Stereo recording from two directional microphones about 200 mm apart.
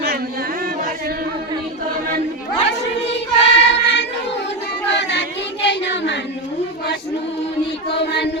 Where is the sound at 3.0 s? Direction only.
60° left (ahead or behind).